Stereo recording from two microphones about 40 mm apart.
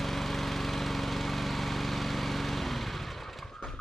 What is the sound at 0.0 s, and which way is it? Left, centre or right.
Lawn mower, centre.